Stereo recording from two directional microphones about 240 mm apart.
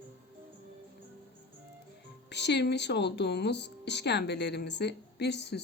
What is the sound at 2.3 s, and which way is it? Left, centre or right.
Speech, left.